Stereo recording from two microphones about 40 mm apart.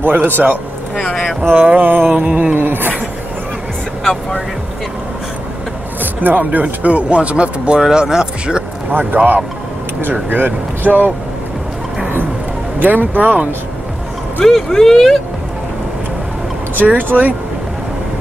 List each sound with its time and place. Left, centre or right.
0.9 s speech: centre
1.5 s speech: right
2.1 s speech: right
2.5 s a sound: right
4.0 s vehicle: centre
6.2 s speech: right
6.6 s speech: right
9.1 s speech: right
10.3 s speech: right
12.7 s speech: right
14.4 s speech: centre
16.7 s speech: right